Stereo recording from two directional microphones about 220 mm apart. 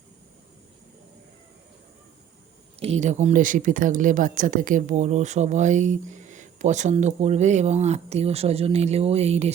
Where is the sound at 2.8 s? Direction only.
30° right (ahead or behind).